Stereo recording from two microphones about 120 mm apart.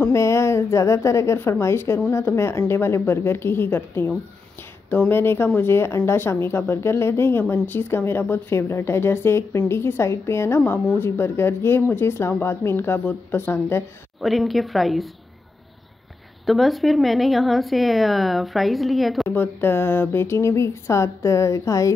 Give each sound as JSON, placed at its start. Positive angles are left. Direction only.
{"t": 0.1, "sound": "speech", "side_deg": 25}
{"t": 14.2, "sound": "a woman's voice", "side_deg": 0}
{"t": 16.4, "sound": "a woman's voice", "side_deg": 0}
{"t": 19.2, "sound": "speech", "side_deg": 15}